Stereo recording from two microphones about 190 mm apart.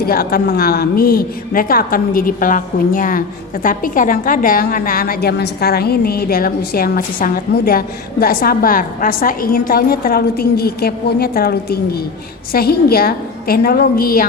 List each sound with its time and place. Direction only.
0.0 s a woman's voice: 50° left (ahead or behind)